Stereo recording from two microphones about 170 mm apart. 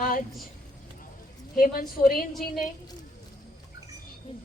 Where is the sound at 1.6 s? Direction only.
55° left (ahead or behind).